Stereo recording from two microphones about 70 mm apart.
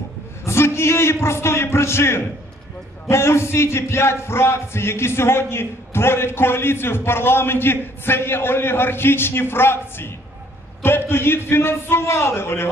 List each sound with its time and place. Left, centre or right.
0.5 s speech: left